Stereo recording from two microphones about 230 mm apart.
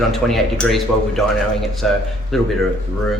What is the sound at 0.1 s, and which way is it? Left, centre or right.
Speech, centre.